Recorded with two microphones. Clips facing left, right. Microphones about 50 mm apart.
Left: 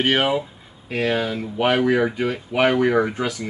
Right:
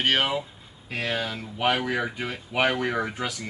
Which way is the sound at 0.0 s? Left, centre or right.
Centre.